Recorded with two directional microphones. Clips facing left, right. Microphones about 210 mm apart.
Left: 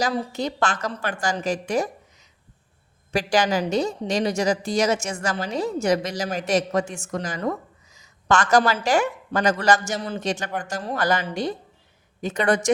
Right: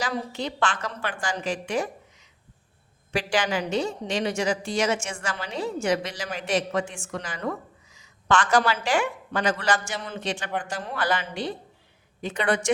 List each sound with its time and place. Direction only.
0.0 s a woman's voice: 40° left (ahead or behind)
3.1 s a woman's voice: 40° left (ahead or behind)